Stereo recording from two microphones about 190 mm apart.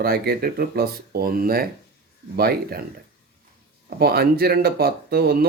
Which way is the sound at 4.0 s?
55° right (ahead or behind).